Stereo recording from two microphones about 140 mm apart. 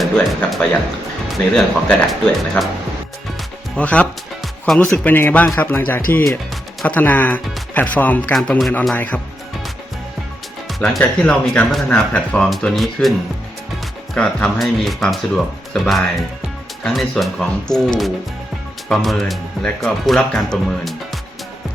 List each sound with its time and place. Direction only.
0.0 s speech: centre (ahead or behind)
3.8 s speech: 10° left (ahead or behind)
8.4 s speech: centre (ahead or behind)
10.7 s speech: centre (ahead or behind)
14.2 s speech: 10° left (ahead or behind)